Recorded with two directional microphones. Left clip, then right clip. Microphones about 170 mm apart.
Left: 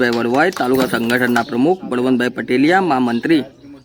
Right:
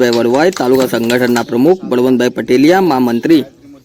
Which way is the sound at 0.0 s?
15° right (ahead or behind).